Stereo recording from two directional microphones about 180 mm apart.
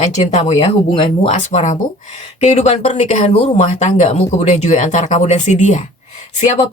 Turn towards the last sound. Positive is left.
turn(degrees=40)  # may be behind; listen again after turning